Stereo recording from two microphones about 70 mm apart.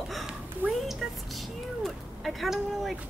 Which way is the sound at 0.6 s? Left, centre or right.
Right.